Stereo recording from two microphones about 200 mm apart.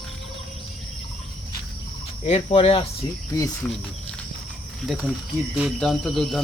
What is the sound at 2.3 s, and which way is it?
Speech, 30° left (ahead or behind).